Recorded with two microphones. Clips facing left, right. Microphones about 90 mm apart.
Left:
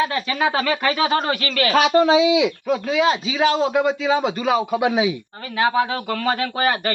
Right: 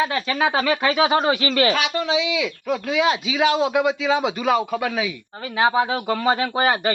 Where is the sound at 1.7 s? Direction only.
40° left (ahead or behind).